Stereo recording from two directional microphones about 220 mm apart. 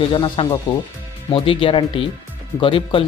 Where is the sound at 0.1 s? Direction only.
20° left (ahead or behind).